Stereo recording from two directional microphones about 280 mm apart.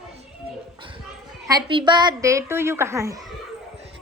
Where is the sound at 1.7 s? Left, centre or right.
Centre.